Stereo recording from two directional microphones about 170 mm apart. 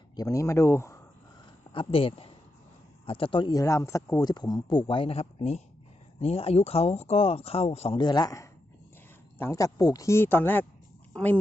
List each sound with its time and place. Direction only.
0.2 s speech: 20° left (ahead or behind)
1.7 s speech: 30° left (ahead or behind); by 11.3 s 10° left (ahead or behind)